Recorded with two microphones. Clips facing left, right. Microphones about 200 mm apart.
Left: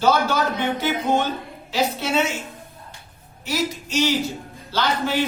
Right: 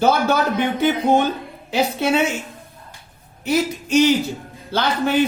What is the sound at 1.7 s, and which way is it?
Speech, 55° right (ahead or behind).